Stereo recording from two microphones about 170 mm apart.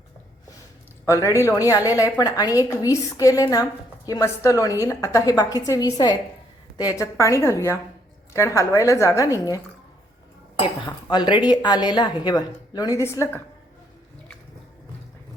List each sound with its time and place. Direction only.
1.0 s a woman's voice: 15° left (ahead or behind)
10.8 s a woman's voice: 25° left (ahead or behind)